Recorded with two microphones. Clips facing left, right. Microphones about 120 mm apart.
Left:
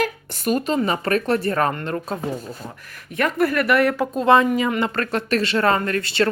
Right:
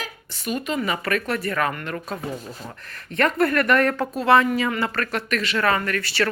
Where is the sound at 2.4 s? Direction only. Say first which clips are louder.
Left 2 dB; 10° left (ahead or behind).